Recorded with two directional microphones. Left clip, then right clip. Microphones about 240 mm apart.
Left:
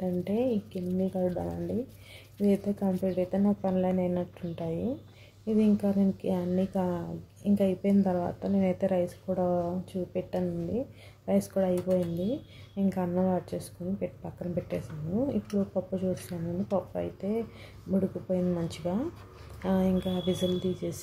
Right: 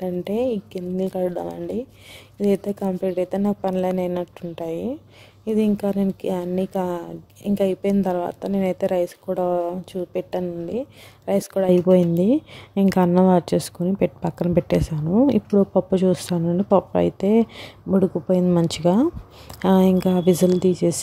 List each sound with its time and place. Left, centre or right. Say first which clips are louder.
0.0 s speech: right 7 dB; right